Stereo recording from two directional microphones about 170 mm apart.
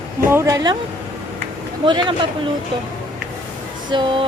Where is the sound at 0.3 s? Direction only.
15° right (ahead or behind).